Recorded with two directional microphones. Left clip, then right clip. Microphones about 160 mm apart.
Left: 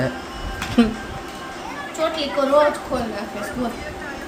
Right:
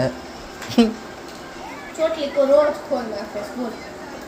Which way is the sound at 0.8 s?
Centre (ahead or behind).